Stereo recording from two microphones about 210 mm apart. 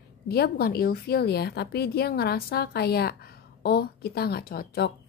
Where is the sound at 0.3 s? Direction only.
50° left (ahead or behind).